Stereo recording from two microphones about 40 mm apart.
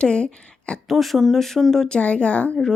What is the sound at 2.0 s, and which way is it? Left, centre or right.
Speech, left.